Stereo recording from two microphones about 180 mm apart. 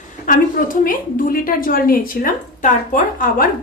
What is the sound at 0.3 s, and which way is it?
A woman's voice, 50° left (ahead or behind).